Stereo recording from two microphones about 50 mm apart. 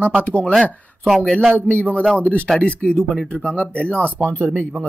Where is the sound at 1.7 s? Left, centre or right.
Left.